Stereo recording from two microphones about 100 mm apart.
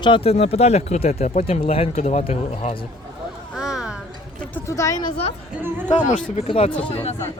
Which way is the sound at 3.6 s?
5° right (ahead or behind).